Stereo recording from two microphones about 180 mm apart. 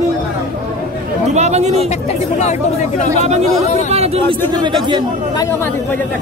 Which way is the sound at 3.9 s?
35° right (ahead or behind).